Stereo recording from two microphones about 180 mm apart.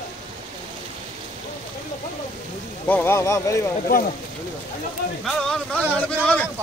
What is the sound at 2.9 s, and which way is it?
Speech, 10° left (ahead or behind).